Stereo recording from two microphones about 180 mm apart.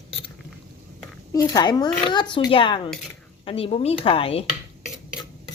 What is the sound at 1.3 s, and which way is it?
Speech, 20° left (ahead or behind).